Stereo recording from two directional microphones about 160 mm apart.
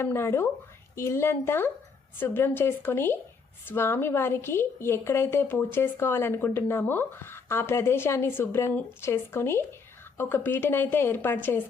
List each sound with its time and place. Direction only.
0.0 s a woman's voice: 15° left (ahead or behind)